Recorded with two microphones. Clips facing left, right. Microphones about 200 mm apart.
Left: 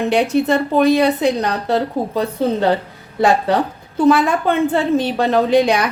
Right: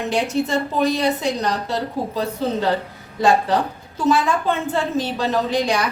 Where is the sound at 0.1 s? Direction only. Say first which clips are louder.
Left 4 dB; 60° left (ahead or behind).